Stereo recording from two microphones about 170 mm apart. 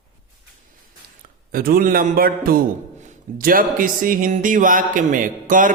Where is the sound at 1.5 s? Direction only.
60° right (ahead or behind).